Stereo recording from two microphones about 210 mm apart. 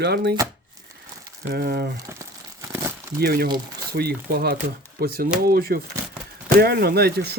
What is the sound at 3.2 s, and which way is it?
Speech, 45° right (ahead or behind).